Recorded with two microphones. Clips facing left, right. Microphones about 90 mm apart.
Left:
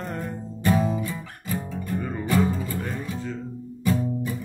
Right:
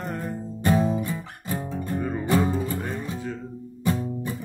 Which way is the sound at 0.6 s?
25° right (ahead or behind).